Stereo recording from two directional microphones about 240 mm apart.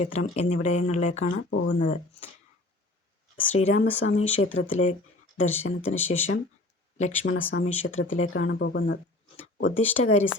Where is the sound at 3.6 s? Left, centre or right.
Left.